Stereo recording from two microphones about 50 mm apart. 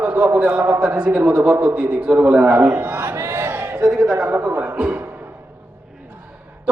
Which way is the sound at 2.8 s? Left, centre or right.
Right.